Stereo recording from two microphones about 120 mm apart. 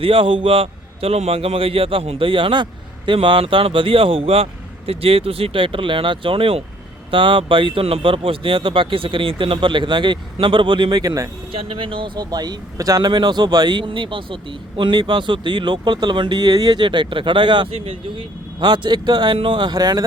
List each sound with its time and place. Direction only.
0.0 s speech: 50° right (ahead or behind); by 11.3 s 30° right (ahead or behind)
11.5 s speech: 45° right (ahead or behind)